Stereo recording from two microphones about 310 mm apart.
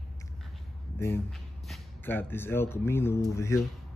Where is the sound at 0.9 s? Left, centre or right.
Centre.